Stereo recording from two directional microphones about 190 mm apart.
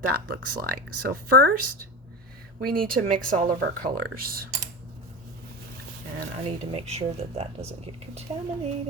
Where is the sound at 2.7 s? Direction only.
45° right (ahead or behind).